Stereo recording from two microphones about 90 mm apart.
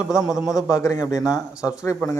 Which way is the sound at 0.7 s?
35° left (ahead or behind).